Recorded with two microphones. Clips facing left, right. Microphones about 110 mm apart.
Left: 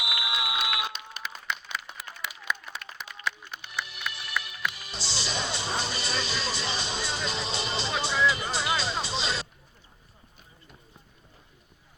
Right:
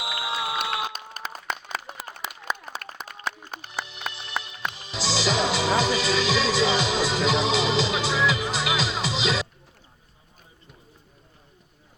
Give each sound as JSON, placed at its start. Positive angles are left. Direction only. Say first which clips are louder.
{"t": 0.0, "sound": "a sound", "louder": "right 3 dB", "side_deg": -35}
{"t": 0.9, "sound": "applause", "louder": "right 3 dB", "side_deg": -40}
{"t": 3.8, "sound": "music", "louder": "right 2 dB", "side_deg": -30}
{"t": 4.9, "sound": "music", "louder": "right 10 dB", "side_deg": -90}